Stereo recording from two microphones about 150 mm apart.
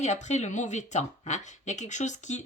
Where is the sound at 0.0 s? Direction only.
50° left (ahead or behind).